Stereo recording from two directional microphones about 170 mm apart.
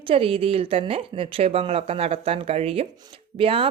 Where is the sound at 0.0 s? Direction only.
30° right (ahead or behind).